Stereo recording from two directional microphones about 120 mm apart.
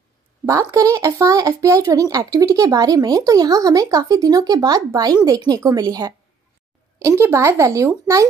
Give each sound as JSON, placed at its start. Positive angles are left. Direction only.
{"t": 0.5, "sound": "a child's voice", "side_deg": -25}
{"t": 7.1, "sound": "a child's voice", "side_deg": -25}